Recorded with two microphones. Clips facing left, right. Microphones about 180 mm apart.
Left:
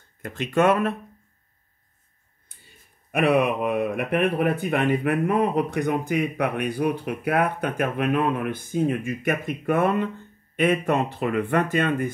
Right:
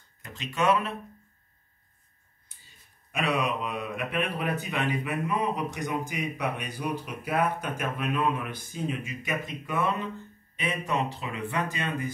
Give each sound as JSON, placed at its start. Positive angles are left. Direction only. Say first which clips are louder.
{"t": 0.2, "sound": "speech", "louder": "left 8 dB", "side_deg": 55}
{"t": 2.6, "sound": "speech", "louder": "left 6 dB", "side_deg": 55}